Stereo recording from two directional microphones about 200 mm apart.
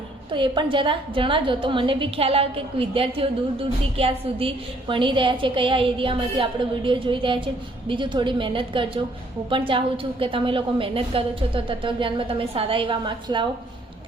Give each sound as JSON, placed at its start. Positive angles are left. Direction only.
{"t": 0.3, "sound": "a woman's voice", "side_deg": -25}